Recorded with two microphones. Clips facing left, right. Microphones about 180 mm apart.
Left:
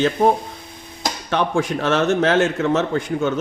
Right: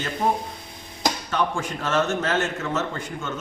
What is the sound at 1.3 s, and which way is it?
A man's voice, 75° left (ahead or behind).